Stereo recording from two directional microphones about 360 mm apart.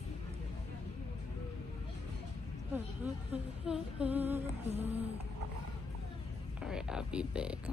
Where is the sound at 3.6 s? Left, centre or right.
Centre.